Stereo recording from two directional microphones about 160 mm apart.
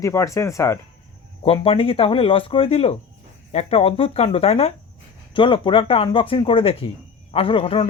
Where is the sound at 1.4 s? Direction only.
35° left (ahead or behind).